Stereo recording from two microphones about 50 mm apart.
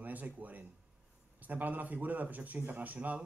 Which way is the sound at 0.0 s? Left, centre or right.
Right.